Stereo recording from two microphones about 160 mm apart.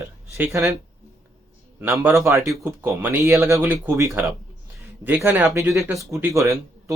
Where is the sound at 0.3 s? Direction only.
15° right (ahead or behind).